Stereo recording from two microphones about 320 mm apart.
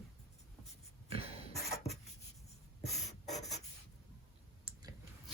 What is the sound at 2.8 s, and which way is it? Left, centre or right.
Rub, centre.